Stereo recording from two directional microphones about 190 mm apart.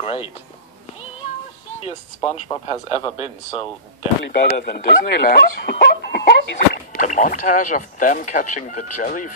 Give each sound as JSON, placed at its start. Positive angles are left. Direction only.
{"t": 0.0, "sound": "speech", "side_deg": 30}
{"t": 1.8, "sound": "speech", "side_deg": 30}
{"t": 4.3, "sound": "speech", "side_deg": 50}
{"t": 6.9, "sound": "speech", "side_deg": 40}